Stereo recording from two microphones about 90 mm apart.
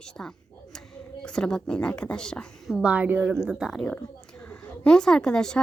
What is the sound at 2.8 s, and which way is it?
Speech, 15° right (ahead or behind).